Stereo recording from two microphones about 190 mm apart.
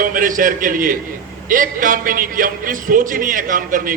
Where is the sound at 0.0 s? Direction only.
45° right (ahead or behind).